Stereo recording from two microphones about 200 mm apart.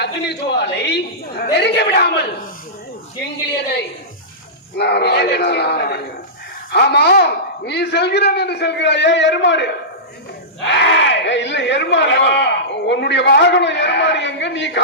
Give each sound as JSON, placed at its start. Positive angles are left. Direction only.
{"t": 0.0, "sound": "speech", "side_deg": 55}
{"t": 4.8, "sound": "speech", "side_deg": 55}